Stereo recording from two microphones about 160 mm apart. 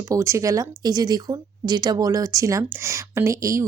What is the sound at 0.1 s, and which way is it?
Speech, 20° right (ahead or behind).